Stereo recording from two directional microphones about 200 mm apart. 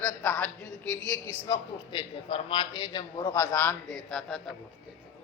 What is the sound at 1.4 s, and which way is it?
A man's voice, 20° left (ahead or behind).